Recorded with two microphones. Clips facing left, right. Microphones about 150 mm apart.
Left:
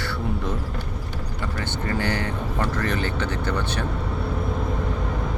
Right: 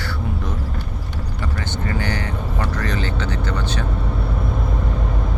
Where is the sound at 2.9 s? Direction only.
55° left (ahead or behind).